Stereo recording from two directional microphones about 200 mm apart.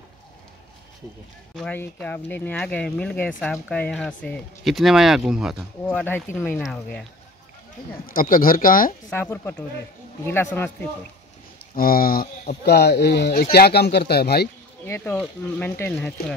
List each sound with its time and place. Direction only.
1.5 s speech: 5° left (ahead or behind)
5.9 s speech: 10° left (ahead or behind)
8.1 s speech: 45° left (ahead or behind)
9.1 s speech: 10° left (ahead or behind)
11.7 s speech: 45° left (ahead or behind)
14.9 s speech: 10° left (ahead or behind)